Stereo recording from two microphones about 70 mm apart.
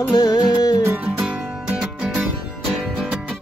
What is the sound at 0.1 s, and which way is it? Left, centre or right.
Music, left.